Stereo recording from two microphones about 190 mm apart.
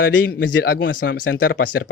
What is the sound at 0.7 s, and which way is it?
Speech, 75° left (ahead or behind).